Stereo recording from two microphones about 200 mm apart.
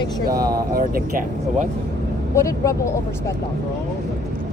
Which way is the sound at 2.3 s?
15° left (ahead or behind).